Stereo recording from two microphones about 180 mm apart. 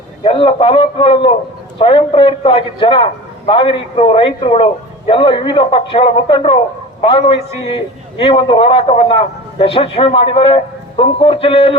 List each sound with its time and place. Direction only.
0.3 s a man's voice: 30° left (ahead or behind)